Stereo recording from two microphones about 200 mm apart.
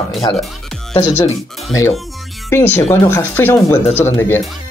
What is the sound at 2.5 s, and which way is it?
Speech, 10° left (ahead or behind).